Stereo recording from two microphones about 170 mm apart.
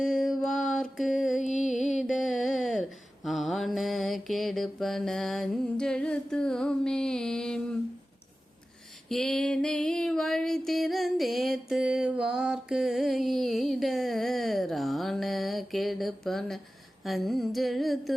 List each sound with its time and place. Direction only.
0.0 s mantra: centre (ahead or behind)
1.4 s music: 45° left (ahead or behind)
1.7 s music: centre (ahead or behind)
3.2 s mantra: centre (ahead or behind)
9.0 s a sound: 5° left (ahead or behind)